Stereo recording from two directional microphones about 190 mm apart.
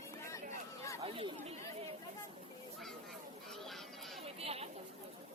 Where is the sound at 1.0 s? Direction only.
30° right (ahead or behind).